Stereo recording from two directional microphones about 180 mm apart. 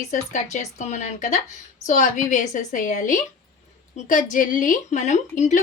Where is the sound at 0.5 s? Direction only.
40° left (ahead or behind).